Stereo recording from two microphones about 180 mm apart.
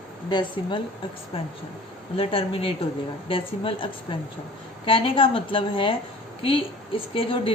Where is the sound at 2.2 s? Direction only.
30° left (ahead or behind).